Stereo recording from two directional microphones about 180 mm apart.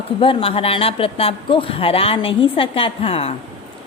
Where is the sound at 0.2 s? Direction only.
30° left (ahead or behind).